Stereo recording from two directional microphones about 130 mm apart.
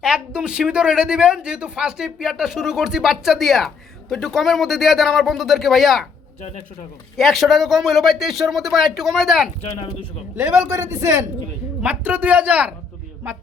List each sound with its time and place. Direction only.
0.0 s speech: 5° right (ahead or behind)
7.2 s speech: centre (ahead or behind)
9.7 s speech: 40° left (ahead or behind)
10.3 s a man's voice: 20° right (ahead or behind)